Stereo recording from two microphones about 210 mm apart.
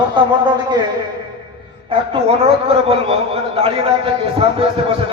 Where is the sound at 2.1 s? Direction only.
25° right (ahead or behind).